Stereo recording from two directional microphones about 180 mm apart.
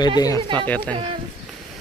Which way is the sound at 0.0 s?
20° left (ahead or behind).